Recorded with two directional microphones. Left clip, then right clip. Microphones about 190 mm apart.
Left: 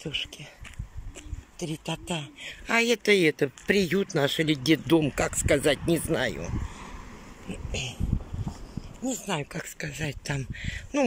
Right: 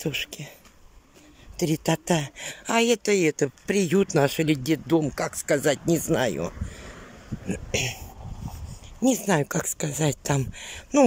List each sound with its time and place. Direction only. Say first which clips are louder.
0.0 s speech: right 3 dB; 20° right (ahead or behind)
1.6 s speech: right 9 dB; 25° right (ahead or behind); by 6.4 s 10° right (ahead or behind)
7.4 s speech: right 7 dB; 20° right (ahead or behind)
9.0 s speech: right 8 dB; 25° right (ahead or behind)